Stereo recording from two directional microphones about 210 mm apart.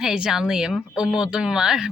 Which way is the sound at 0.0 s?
Centre (ahead or behind).